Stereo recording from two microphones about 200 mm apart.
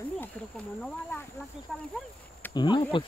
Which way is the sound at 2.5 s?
20° left (ahead or behind).